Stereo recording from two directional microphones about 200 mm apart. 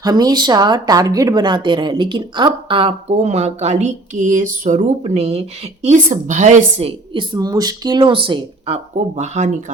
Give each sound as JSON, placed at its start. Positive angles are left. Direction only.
{"t": 0.0, "sound": "a woman's voice", "side_deg": -20}